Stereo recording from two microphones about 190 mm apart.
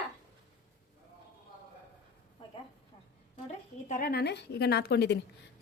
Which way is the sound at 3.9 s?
50° left (ahead or behind).